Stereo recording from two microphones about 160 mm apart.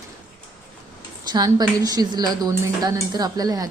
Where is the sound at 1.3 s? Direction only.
25° right (ahead or behind).